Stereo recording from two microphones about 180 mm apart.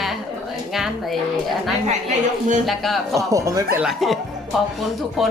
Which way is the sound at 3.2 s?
15° right (ahead or behind).